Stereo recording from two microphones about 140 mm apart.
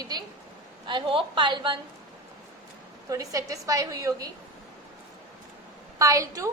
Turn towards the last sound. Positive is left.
turn(degrees=-25)  # may be behind; listen again after turning